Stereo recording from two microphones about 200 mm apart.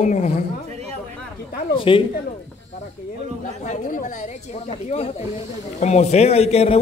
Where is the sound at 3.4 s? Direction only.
40° left (ahead or behind).